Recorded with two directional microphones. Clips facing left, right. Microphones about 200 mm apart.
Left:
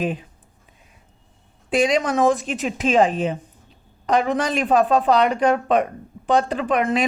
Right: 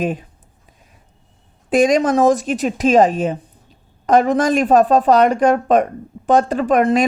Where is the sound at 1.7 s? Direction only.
45° right (ahead or behind).